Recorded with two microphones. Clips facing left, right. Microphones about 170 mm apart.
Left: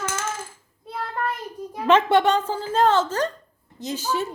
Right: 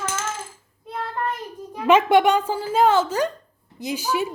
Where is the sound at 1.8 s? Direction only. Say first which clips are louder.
Right 2 dB; 10° right (ahead or behind).